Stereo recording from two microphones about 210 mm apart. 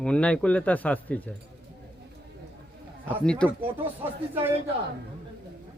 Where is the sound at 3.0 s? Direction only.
5° left (ahead or behind).